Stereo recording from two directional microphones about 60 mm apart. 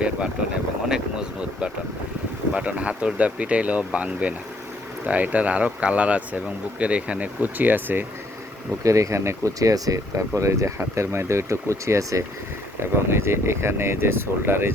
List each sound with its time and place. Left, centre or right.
0.9 s a sound: centre
2.5 s speech: right
8.8 s speech: right
12.8 s speech: right